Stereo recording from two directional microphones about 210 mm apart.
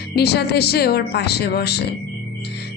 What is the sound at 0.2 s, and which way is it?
Speech, 50° left (ahead or behind).